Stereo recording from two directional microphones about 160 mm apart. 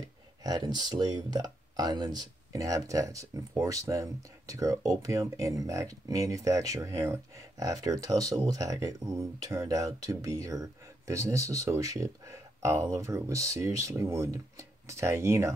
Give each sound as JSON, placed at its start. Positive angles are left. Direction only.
{"t": 0.4, "sound": "speech", "side_deg": -25}